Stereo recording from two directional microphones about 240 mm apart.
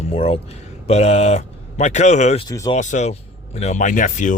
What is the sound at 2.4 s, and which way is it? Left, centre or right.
Speech, centre.